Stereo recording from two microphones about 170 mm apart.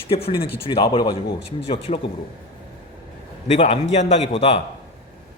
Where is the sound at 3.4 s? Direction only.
40° left (ahead or behind).